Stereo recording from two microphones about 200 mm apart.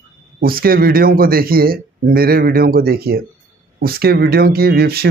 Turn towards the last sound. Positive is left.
turn(degrees=-50)  # may be behind; listen again after turning